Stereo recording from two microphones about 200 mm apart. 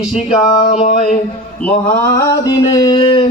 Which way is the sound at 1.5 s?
5° left (ahead or behind).